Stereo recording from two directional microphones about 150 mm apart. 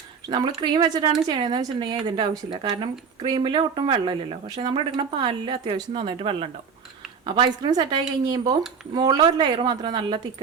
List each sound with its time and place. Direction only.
0.3 s speech: 30° right (ahead or behind)